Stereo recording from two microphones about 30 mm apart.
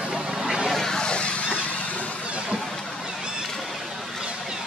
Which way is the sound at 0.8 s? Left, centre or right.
Left.